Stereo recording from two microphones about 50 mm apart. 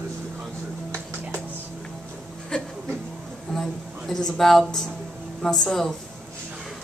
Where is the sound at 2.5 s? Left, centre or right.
Centre.